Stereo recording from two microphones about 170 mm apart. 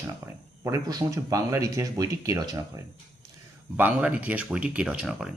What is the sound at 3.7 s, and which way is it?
Speech, 10° right (ahead or behind).